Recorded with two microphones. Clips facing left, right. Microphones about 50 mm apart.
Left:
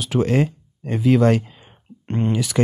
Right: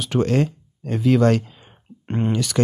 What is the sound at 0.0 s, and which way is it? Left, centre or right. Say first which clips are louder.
Speech: left 1 dB; centre.